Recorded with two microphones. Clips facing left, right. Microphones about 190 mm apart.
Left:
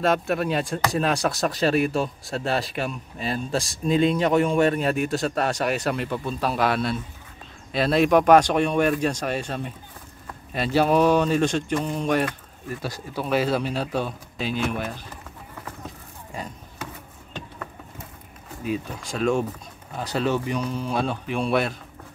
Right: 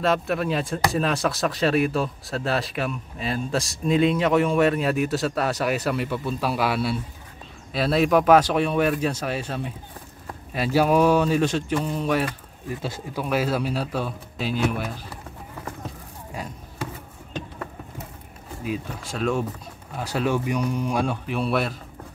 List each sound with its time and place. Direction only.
0.0 s speech: centre (ahead or behind)
12.6 s speech: 20° right (ahead or behind)
13.2 s speech: 5° right (ahead or behind)
18.6 s speech: centre (ahead or behind)